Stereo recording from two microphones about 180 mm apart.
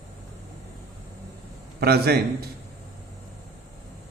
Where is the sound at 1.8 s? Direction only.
60° right (ahead or behind).